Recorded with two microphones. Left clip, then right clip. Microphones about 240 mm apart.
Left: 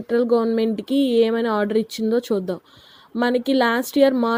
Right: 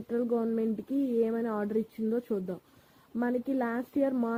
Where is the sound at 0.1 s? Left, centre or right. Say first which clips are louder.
Left 12 dB; left.